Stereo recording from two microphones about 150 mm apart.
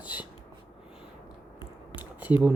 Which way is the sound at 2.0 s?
10° right (ahead or behind).